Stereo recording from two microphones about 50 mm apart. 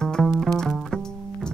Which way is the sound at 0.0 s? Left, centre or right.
Centre.